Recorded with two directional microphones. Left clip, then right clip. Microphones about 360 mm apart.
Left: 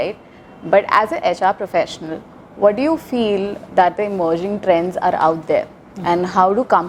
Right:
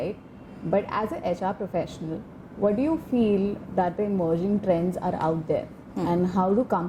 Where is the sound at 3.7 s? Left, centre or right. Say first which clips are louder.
Left 12 dB; centre.